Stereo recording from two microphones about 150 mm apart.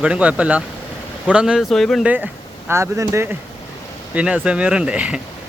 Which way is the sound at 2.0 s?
10° right (ahead or behind).